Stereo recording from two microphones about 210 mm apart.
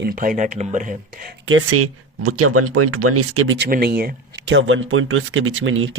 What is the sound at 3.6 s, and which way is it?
Speech, 45° right (ahead or behind).